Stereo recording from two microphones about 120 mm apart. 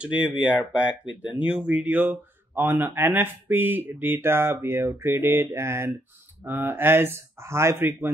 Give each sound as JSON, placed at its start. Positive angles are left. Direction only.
{"t": 0.0, "sound": "speech", "side_deg": -10}